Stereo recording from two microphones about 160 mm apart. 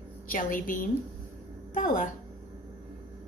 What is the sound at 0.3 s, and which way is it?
A woman's voice, 60° left (ahead or behind).